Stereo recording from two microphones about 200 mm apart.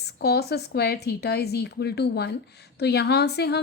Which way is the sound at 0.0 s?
55° left (ahead or behind).